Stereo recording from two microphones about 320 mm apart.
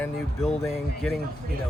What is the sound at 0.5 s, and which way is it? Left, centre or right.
Speech, centre.